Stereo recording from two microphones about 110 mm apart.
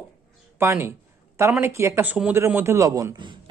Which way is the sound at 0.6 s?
25° right (ahead or behind).